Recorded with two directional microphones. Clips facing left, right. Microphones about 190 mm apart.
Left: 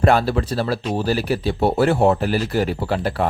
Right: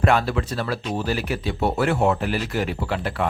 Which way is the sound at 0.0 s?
35° left (ahead or behind).